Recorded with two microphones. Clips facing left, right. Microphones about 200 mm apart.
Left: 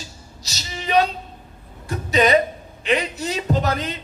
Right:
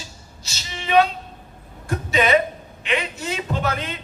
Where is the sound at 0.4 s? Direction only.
40° left (ahead or behind).